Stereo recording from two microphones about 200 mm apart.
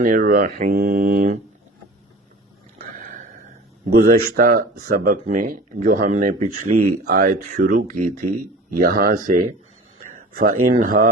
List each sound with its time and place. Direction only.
0.0 s speech: 45° right (ahead or behind)
0.6 s mantra: 45° right (ahead or behind)
2.8 s a sound: 40° right (ahead or behind)
3.8 s speech: 45° right (ahead or behind)
10.2 s a sound: 45° right (ahead or behind)
10.7 s speech: 40° right (ahead or behind)